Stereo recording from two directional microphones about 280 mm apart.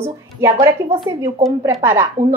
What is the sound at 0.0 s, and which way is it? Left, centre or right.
A woman's voice, centre.